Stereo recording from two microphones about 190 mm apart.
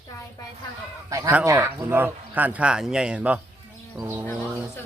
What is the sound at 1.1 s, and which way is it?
Speech, 10° right (ahead or behind).